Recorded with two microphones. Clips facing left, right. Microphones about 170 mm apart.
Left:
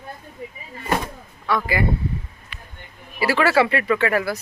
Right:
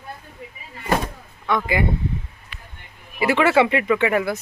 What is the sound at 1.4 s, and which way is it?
Speech, 20° right (ahead or behind).